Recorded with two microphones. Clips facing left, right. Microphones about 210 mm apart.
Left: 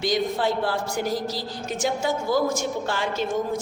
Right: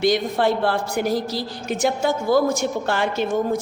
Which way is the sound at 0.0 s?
60° right (ahead or behind).